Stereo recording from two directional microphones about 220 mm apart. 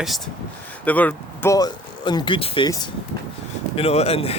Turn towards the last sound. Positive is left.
turn(degrees=25)  # may be behind; listen again after turning